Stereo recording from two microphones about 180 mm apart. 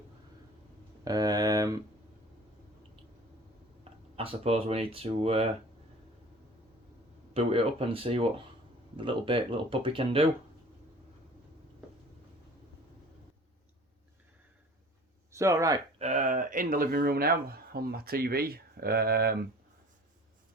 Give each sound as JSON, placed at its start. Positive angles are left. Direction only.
{"t": 1.0, "sound": "speech", "side_deg": -20}
{"t": 4.1, "sound": "speech", "side_deg": -35}
{"t": 7.3, "sound": "speech", "side_deg": -30}
{"t": 15.3, "sound": "speech", "side_deg": -15}
{"t": 16.0, "sound": "speech", "side_deg": -40}